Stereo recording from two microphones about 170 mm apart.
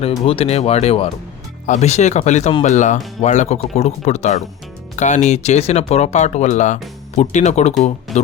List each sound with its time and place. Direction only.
0.0 s speech: 35° left (ahead or behind)